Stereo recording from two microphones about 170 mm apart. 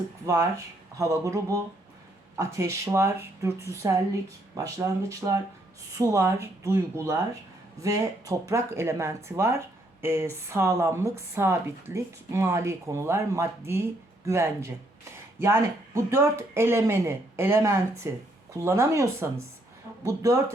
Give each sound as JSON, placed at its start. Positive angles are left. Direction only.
{"t": 0.9, "sound": "speech", "side_deg": -15}